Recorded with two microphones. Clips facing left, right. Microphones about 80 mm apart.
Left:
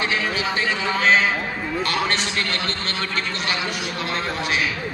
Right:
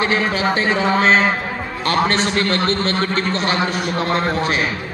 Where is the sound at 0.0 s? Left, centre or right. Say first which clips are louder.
Right 5 dB; right.